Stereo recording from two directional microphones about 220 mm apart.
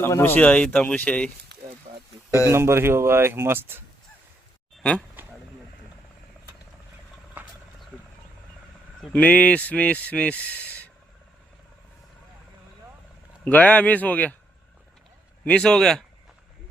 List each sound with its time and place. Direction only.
0.0 s speech: 10° left (ahead or behind)
1.9 s a sound: 30° right (ahead or behind)
2.5 s speech: 10° right (ahead or behind)
4.8 s speech: 5° left (ahead or behind)
9.0 s speech: 5° left (ahead or behind)
13.4 s speech: 5° left (ahead or behind)
15.4 s speech: 5° left (ahead or behind)